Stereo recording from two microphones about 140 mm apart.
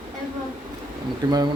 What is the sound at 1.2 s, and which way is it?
Speech, 25° right (ahead or behind).